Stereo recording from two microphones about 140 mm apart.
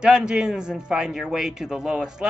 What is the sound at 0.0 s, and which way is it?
A man's voice, 5° right (ahead or behind).